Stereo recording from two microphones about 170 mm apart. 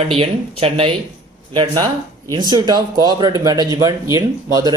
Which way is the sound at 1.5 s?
25° right (ahead or behind).